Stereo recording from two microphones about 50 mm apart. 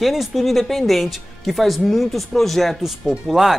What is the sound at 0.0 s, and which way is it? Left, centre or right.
Speech, centre.